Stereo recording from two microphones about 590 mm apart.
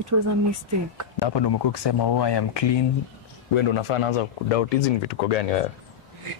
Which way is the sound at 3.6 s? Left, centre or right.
Left.